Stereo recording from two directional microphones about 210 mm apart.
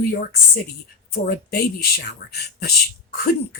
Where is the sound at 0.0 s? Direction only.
45° left (ahead or behind).